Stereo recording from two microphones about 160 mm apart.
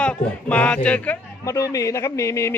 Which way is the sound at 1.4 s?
20° left (ahead or behind).